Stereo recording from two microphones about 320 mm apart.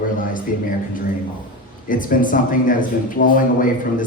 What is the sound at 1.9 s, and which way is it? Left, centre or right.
Speech, left.